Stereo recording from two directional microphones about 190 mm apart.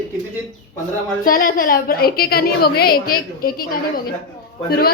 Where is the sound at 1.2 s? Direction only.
50° left (ahead or behind).